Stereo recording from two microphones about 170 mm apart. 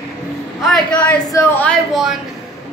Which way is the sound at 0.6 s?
5° left (ahead or behind).